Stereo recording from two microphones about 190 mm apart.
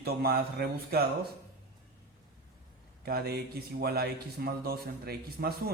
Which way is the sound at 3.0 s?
55° right (ahead or behind).